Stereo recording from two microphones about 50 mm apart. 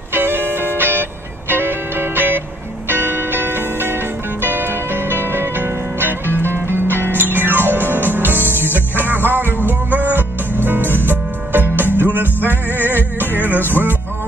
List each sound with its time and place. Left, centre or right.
0.1 s music: right